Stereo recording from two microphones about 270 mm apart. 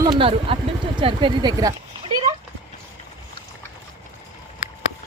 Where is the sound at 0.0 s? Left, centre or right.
Centre.